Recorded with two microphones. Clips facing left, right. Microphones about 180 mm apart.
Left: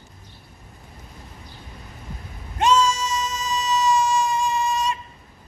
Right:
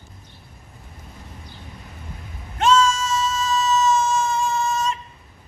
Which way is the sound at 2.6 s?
15° left (ahead or behind).